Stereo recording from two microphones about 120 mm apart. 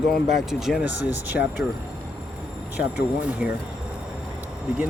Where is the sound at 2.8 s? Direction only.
10° right (ahead or behind).